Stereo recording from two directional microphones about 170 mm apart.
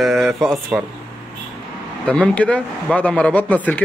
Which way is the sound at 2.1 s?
5° left (ahead or behind).